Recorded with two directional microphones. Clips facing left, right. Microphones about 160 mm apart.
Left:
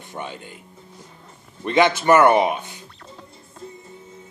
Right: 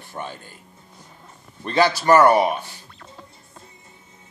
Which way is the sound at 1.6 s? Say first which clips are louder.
Left 1 dB; 20° left (ahead or behind).